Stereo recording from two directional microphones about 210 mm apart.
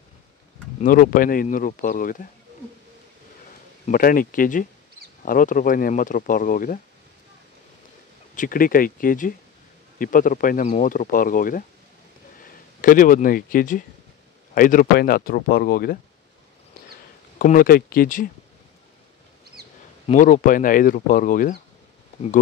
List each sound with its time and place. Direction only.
0.7 s speech: 40° left (ahead or behind)
3.8 s speech: 40° left (ahead or behind)
8.4 s speech: 40° left (ahead or behind)
12.8 s speech: 40° left (ahead or behind)
17.4 s speech: 40° left (ahead or behind)
20.1 s speech: 40° left (ahead or behind)